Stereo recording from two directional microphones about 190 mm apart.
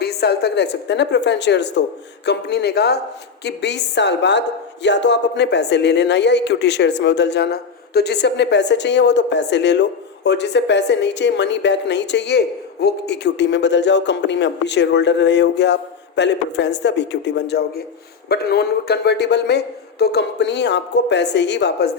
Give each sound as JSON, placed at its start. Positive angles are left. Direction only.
{"t": 0.0, "sound": "a woman's voice", "side_deg": 60}